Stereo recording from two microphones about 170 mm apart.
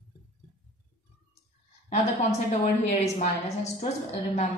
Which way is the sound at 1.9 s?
40° left (ahead or behind).